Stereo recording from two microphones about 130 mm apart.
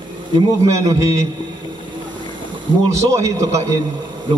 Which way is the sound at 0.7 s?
25° right (ahead or behind).